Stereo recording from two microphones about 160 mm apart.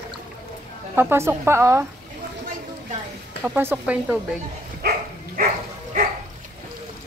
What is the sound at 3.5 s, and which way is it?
Speech, 10° right (ahead or behind).